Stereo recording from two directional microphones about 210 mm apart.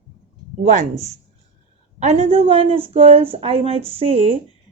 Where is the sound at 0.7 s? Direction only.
35° right (ahead or behind).